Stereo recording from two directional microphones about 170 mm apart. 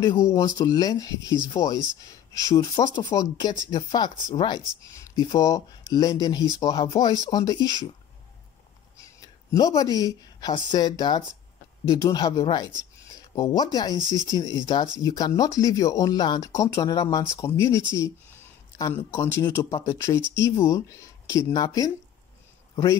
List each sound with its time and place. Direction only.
0.0 s speech: 20° left (ahead or behind)
1.2 s speech: 25° right (ahead or behind)
1.5 s speech: 20° left (ahead or behind)
9.0 s a sound: 20° left (ahead or behind)
9.8 s speech: 25° right (ahead or behind)
10.4 s speech: 25° left (ahead or behind)
13.9 s speech: 25° right (ahead or behind)
15.0 s speech: 20° left (ahead or behind)